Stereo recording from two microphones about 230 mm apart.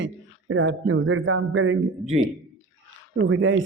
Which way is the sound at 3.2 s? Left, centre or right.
Right.